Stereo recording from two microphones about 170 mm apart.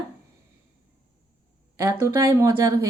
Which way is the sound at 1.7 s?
15° right (ahead or behind).